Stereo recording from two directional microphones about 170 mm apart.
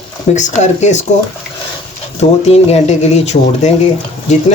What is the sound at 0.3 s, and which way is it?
Speech, 45° left (ahead or behind).